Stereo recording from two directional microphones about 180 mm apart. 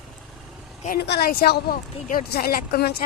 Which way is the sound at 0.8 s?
60° left (ahead or behind).